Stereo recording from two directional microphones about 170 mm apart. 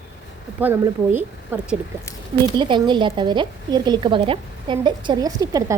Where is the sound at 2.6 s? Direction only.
30° right (ahead or behind).